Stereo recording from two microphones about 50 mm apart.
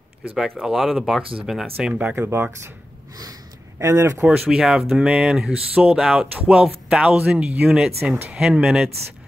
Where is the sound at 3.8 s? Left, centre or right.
Right.